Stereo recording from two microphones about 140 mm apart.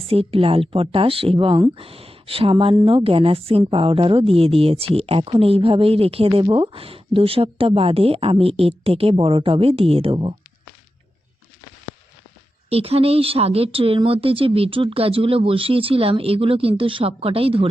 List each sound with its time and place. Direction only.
0.1 s speech: 45° right (ahead or behind)
12.7 s speech: 45° right (ahead or behind)